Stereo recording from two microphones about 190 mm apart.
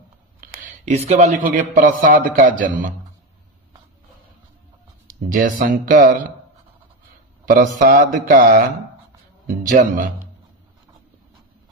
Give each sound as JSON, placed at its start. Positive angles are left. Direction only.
{"t": 0.4, "sound": "speech", "side_deg": -40}
{"t": 5.0, "sound": "speech", "side_deg": -45}
{"t": 7.4, "sound": "speech", "side_deg": -45}